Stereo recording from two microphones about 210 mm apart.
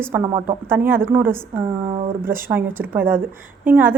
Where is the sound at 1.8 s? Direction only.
30° right (ahead or behind).